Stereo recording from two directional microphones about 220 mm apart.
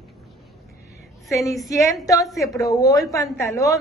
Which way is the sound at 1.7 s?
15° left (ahead or behind).